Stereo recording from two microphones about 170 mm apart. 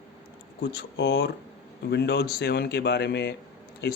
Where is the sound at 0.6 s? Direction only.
80° left.